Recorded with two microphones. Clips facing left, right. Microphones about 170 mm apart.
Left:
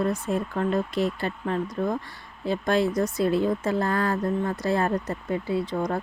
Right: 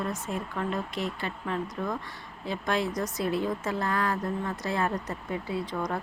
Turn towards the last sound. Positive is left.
turn(degrees=30)  # may be behind; listen again after turning